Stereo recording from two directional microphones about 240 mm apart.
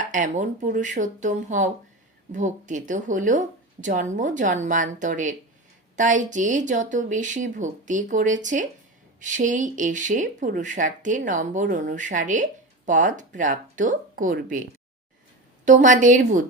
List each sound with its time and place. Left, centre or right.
0.1 s speech: right
15.6 s speech: right